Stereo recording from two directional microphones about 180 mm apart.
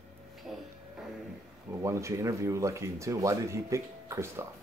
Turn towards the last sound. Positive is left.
turn(degrees=-15)  # may be behind; listen again after turning